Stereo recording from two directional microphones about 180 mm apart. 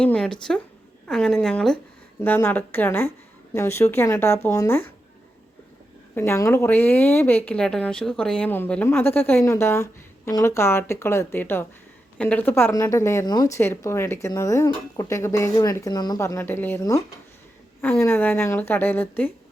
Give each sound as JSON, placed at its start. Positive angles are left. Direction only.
{"t": 0.0, "sound": "speech", "side_deg": 5}
{"t": 6.1, "sound": "speech", "side_deg": 15}